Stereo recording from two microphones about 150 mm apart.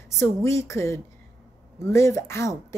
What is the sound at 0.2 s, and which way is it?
A woman's voice, 20° left (ahead or behind).